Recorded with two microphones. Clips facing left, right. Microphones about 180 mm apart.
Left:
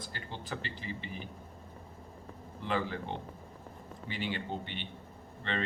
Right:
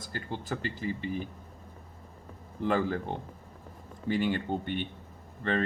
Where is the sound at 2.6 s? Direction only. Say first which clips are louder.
Right 6 dB; 45° right (ahead or behind).